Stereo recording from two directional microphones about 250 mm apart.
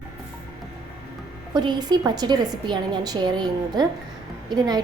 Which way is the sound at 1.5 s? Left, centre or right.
Centre.